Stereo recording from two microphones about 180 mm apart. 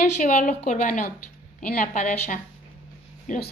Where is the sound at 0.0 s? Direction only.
45° left (ahead or behind).